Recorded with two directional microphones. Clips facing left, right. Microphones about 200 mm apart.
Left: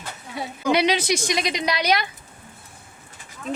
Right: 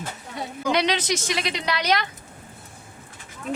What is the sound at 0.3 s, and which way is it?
A woman's voice, 10° left (ahead or behind).